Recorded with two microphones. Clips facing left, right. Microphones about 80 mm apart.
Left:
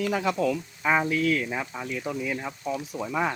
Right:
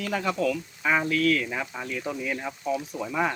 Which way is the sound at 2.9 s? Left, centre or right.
Centre.